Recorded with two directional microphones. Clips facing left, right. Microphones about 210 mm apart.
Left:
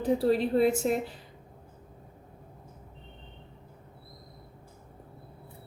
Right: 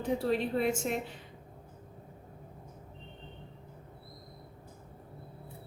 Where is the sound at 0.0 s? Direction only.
35° left (ahead or behind).